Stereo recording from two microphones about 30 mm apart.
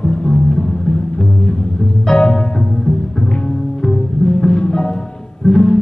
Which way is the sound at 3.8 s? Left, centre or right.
Centre.